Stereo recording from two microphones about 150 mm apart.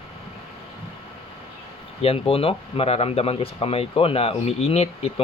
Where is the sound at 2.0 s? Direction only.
40° left (ahead or behind).